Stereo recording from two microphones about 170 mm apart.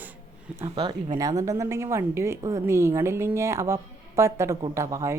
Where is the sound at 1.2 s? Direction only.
20° right (ahead or behind).